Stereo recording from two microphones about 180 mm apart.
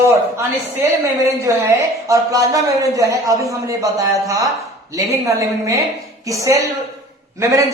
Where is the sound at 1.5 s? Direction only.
15° right (ahead or behind).